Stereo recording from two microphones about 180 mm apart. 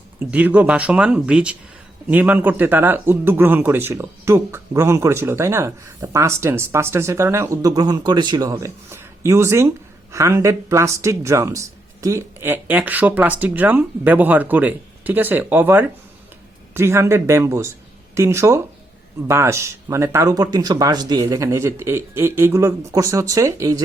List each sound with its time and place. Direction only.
0.2 s a man's voice: 10° right (ahead or behind)